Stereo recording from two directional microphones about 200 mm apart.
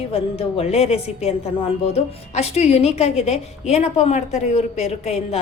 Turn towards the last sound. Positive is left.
turn(degrees=30)  # may be behind; listen again after turning